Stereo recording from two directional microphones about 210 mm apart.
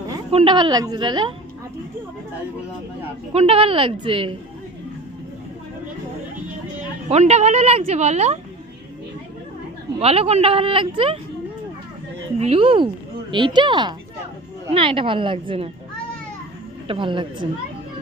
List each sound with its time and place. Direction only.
0.3 s speech: 25° right (ahead or behind)
3.3 s speech: 25° right (ahead or behind)
7.1 s speech: 30° right (ahead or behind)
10.0 s speech: 30° right (ahead or behind)
12.4 s speech: 25° right (ahead or behind)
16.9 s speech: 25° right (ahead or behind)